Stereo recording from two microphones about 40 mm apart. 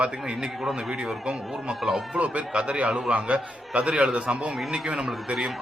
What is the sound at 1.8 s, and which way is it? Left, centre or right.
Speech, centre.